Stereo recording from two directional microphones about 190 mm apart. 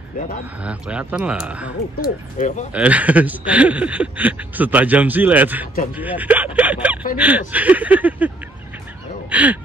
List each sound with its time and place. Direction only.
0.6 s speech: 5° right (ahead or behind)
2.4 s speech: 40° left (ahead or behind)
2.7 s speech: 10° right (ahead or behind)
9.3 s speech: 10° right (ahead or behind)